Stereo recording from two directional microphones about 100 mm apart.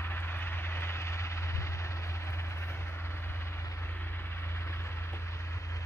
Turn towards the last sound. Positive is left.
turn(degrees=25)  # may be behind; listen again after turning